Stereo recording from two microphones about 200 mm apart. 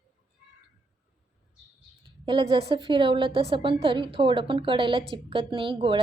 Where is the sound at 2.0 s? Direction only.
25° right (ahead or behind).